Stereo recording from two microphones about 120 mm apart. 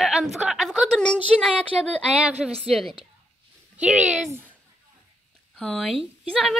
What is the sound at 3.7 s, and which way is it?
Speech, 10° right (ahead or behind).